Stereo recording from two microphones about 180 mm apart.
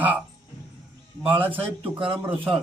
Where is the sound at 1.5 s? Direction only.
30° right (ahead or behind).